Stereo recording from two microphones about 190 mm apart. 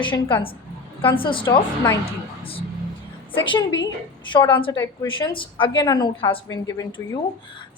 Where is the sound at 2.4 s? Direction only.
30° left (ahead or behind).